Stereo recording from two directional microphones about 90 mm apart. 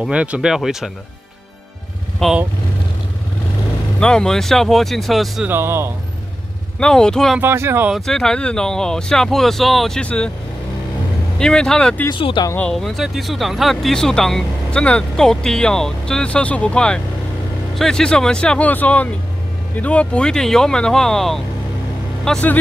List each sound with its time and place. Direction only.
0.1 s speech: 15° right (ahead or behind)
2.2 s speech: 5° left (ahead or behind)
4.0 s speech: 10° left (ahead or behind)
5.5 s speech: 25° right (ahead or behind)
6.8 s speech: 10° left (ahead or behind)
7.3 s speech: 25° right (ahead or behind)
8.0 s speech: 5° left (ahead or behind)
11.3 s speech: 5° left (ahead or behind)
12.4 s speech: 55° left (ahead or behind)
12.7 s speech: centre (ahead or behind)